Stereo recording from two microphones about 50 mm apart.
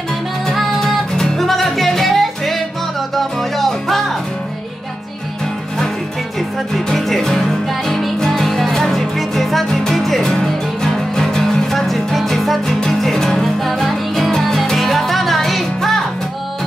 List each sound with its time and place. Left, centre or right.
0.5 s music: centre
6.7 s music: centre